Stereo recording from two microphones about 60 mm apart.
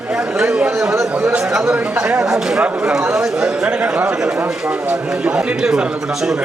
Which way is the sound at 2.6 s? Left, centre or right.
Right.